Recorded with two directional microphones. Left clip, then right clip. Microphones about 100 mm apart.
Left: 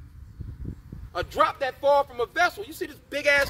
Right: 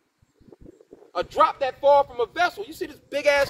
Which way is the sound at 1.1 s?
25° left (ahead or behind).